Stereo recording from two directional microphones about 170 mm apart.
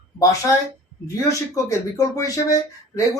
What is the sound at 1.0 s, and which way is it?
Speech, 20° left (ahead or behind).